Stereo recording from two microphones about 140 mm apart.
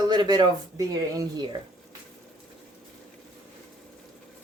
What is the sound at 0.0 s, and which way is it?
Speech, 30° right (ahead or behind).